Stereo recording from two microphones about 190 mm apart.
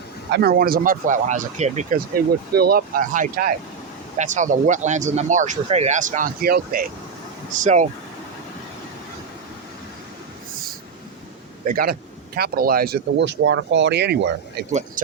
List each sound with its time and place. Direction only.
0.3 s speech: 55° right (ahead or behind); by 7.9 s 40° right (ahead or behind)
10.5 s train: 50° right (ahead or behind)
11.6 s speech: 50° right (ahead or behind)
14.7 s speech: 40° right (ahead or behind)